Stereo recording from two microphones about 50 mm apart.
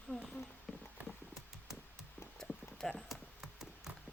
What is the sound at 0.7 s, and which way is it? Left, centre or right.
Clip-clop, centre.